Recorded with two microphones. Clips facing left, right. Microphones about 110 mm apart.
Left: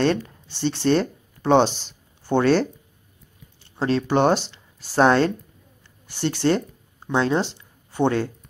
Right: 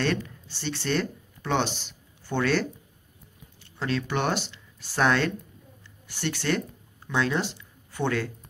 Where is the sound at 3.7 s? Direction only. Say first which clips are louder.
Left 8 dB; 35° left (ahead or behind).